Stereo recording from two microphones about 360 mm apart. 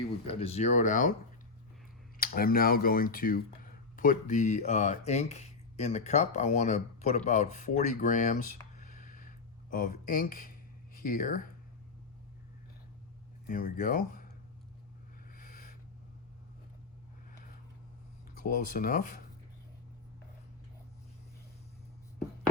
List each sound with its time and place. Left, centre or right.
0.3 s speech: centre
2.1 s speech: left
13.5 s speech: left
15.3 s a sound: left
18.3 s speech: left